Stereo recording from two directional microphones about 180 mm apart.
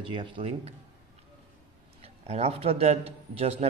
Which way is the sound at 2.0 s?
35° right (ahead or behind).